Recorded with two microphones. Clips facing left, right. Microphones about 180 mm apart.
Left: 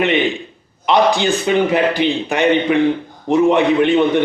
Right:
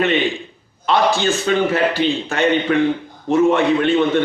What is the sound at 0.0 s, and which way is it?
A man's voice, 15° left (ahead or behind).